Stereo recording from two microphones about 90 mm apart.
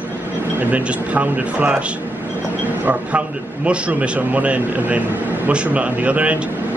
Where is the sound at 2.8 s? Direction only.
15° right (ahead or behind).